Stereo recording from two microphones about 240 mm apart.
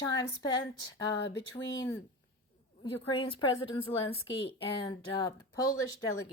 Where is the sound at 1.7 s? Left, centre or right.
Centre.